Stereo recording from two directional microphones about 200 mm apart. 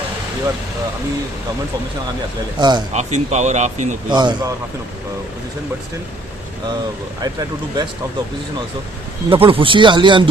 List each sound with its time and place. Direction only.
2.6 s speech: 20° right (ahead or behind)
2.9 s speech: 35° right (ahead or behind)
4.1 s speech: 20° right (ahead or behind)
7.2 s speech: 20° right (ahead or behind)
9.3 s speech: 25° right (ahead or behind)